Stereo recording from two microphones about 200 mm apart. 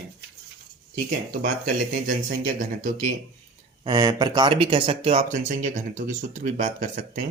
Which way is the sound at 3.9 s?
20° right (ahead or behind).